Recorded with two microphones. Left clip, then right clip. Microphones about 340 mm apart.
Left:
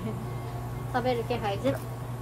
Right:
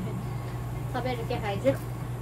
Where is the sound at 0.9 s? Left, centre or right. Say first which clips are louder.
Left 4 dB; centre.